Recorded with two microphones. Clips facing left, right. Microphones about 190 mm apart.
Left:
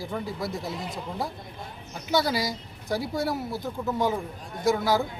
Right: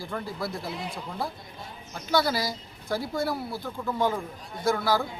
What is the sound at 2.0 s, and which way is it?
A man's voice, 15° left (ahead or behind).